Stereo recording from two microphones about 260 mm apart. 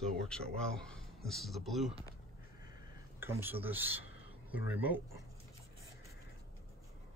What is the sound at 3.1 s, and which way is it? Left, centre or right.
Speech, centre.